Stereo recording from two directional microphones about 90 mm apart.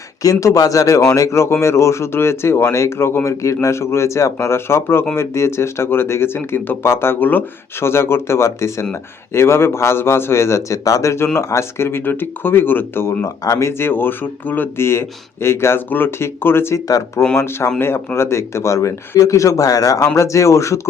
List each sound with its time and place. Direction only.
0.2 s speech: 40° left (ahead or behind)